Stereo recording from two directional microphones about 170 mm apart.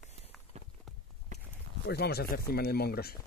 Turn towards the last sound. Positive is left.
turn(degrees=65)  # may be behind; listen again after turning